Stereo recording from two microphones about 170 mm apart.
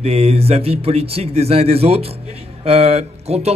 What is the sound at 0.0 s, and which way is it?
A man's voice, 35° right (ahead or behind).